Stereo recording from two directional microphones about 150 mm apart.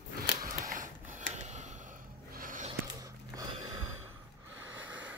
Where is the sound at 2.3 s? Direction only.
65° right (ahead or behind).